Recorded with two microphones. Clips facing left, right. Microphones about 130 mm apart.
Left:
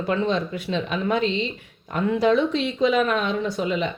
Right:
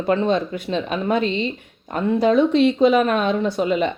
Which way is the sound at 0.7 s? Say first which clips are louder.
Right 3 dB; 45° right (ahead or behind).